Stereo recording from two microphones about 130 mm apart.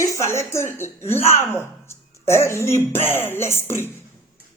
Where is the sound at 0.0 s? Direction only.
20° left (ahead or behind).